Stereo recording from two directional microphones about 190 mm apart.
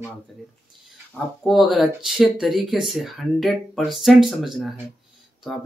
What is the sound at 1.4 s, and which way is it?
Speech, centre (ahead or behind).